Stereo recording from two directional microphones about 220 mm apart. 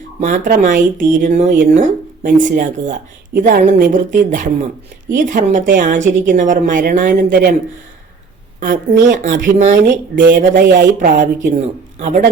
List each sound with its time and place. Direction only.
0.2 s speech: 35° right (ahead or behind)
8.6 s speech: 40° right (ahead or behind)